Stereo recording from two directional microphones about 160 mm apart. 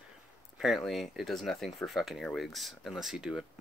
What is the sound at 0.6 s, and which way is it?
Speech, centre (ahead or behind).